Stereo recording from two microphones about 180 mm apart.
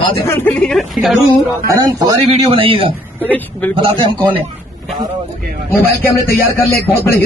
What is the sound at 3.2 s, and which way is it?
Speech, 10° left (ahead or behind).